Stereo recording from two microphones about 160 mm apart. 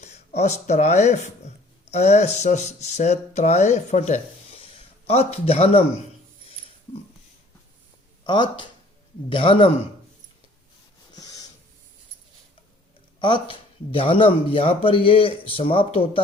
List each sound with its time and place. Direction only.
0.0 s speech: 45° left (ahead or behind)
4.6 s a sound: 40° left (ahead or behind)
8.2 s speech: 30° left (ahead or behind)
11.1 s wheeze: 20° left (ahead or behind)
13.1 s speech: 30° left (ahead or behind)